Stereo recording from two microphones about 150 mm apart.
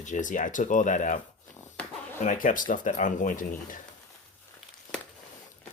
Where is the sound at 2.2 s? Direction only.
60° left (ahead or behind).